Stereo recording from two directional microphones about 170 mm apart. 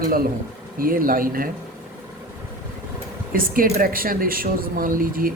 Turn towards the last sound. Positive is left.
turn(degrees=-55)  # may be behind; listen again after turning